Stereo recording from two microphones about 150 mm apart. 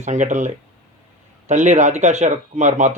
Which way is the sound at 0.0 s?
55° right (ahead or behind).